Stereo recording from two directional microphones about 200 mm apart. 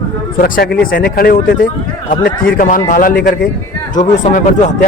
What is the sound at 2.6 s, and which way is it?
A man's voice, 40° left (ahead or behind).